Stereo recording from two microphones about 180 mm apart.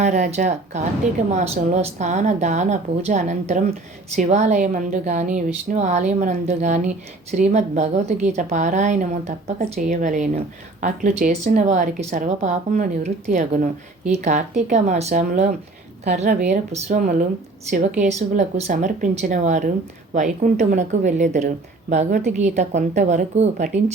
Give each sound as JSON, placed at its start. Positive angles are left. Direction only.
{"t": 0.0, "sound": "speech", "side_deg": -40}